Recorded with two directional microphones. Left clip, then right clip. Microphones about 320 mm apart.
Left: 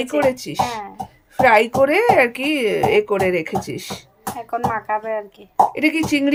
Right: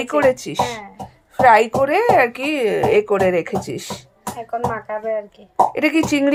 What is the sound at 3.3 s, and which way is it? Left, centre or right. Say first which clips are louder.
Speech: right 2 dB; centre.